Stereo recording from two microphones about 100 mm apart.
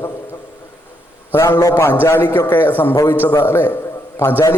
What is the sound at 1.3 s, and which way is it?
A man's voice, 25° left (ahead or behind).